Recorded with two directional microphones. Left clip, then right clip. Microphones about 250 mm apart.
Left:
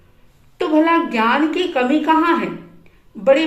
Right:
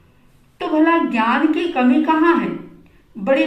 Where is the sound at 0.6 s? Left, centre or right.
Left.